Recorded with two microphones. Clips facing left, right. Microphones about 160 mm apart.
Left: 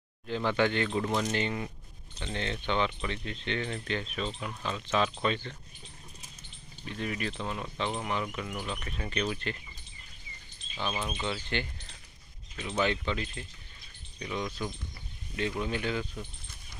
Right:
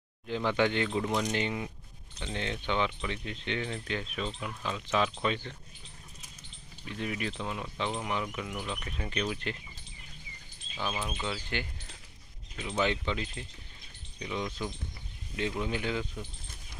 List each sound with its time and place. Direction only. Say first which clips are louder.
0.3 s speech: even; 15° right (ahead or behind)
6.9 s speech: even; 10° right (ahead or behind)
8.5 s speech: even; 10° left (ahead or behind)
8.8 s speech: left 1 dB; 10° right (ahead or behind)
10.8 s speech: left 1 dB; 5° right (ahead or behind)